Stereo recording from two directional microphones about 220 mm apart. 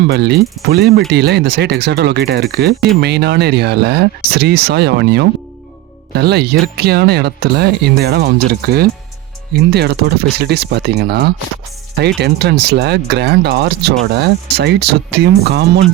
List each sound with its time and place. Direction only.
0.1 s speech: 45° right (ahead or behind)